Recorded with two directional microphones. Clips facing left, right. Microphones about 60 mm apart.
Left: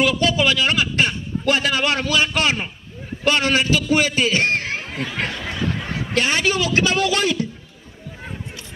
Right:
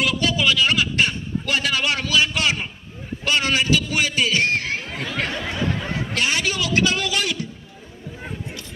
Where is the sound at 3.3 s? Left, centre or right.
Left.